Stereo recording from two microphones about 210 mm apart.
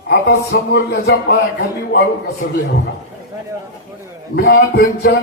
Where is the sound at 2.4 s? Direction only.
40° left (ahead or behind).